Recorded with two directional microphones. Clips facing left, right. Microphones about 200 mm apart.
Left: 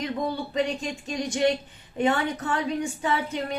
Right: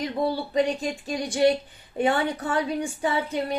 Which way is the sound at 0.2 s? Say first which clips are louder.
Right 5 dB; 35° right (ahead or behind).